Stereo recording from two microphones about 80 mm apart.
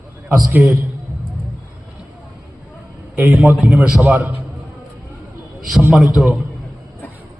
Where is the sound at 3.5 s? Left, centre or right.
Centre.